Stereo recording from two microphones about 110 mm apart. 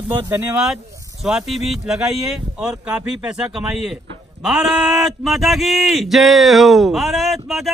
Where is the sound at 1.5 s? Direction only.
Centre (ahead or behind).